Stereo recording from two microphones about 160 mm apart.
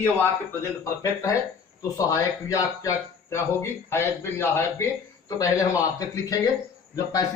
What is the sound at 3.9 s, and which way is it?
A man's voice, 15° left (ahead or behind).